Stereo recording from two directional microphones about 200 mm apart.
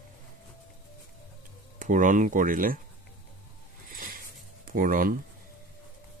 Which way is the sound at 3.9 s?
45° right (ahead or behind).